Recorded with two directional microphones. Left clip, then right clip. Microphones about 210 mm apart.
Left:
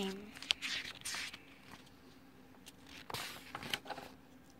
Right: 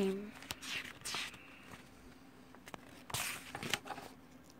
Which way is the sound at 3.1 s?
35° right (ahead or behind).